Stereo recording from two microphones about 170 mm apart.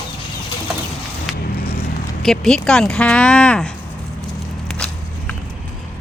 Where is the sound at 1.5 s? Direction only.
65° left (ahead or behind).